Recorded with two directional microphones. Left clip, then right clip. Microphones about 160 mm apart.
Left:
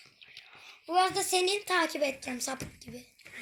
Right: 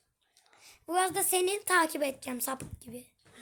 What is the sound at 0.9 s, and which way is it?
Speech, 50° right (ahead or behind).